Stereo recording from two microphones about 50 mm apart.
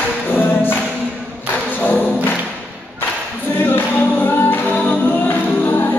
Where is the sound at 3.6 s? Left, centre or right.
Left.